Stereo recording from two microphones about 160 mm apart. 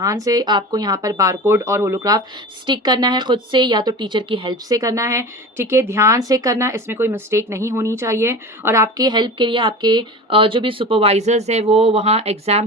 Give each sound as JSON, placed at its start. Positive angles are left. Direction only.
{"t": 0.0, "sound": "speech", "side_deg": -20}